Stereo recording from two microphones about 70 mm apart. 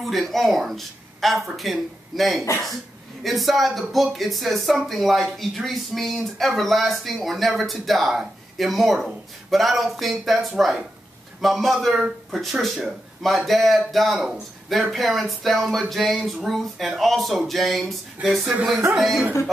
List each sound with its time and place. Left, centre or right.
0.0 s speech: centre
18.2 s speech: right
18.9 s speech: centre